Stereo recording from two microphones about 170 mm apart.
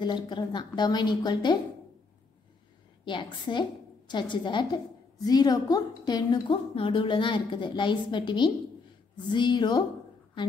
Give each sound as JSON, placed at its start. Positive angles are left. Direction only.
{"t": 0.0, "sound": "a woman's voice", "side_deg": 25}
{"t": 3.1, "sound": "a woman's voice", "side_deg": 30}